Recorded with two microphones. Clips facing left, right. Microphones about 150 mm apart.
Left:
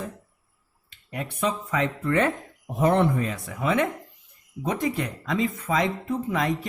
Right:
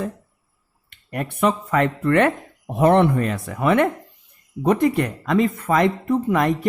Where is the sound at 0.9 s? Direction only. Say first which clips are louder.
Right 6 dB; 60° right (ahead or behind).